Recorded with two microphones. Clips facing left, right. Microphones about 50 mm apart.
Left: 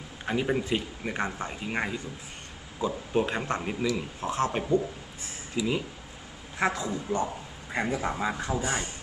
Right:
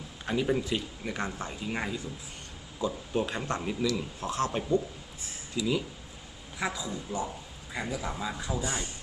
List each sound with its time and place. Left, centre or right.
0.3 s speech: left
6.6 s a man's voice: left